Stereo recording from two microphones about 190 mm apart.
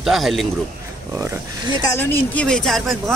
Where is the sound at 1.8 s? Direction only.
10° left (ahead or behind).